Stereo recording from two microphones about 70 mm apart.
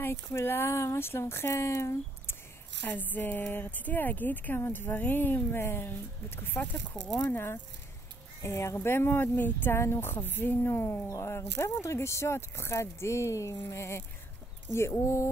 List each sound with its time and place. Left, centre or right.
0.0 s speech: left
2.9 s speech: left
8.4 s speech: left